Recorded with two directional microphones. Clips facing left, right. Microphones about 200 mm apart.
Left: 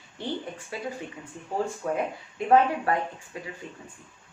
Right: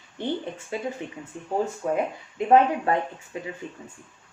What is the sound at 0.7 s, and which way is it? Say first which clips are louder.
Speech: right 4 dB; 20° right (ahead or behind).